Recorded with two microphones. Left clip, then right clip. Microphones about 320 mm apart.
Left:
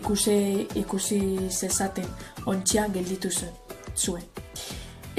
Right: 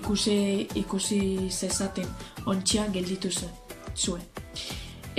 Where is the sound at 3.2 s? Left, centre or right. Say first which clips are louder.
Left 1 dB; centre.